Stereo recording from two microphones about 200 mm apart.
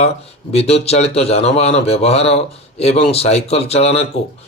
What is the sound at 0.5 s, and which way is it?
Speech, 30° left (ahead or behind).